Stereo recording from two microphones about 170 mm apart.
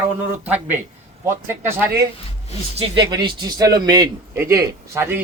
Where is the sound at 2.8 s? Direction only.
30° right (ahead or behind).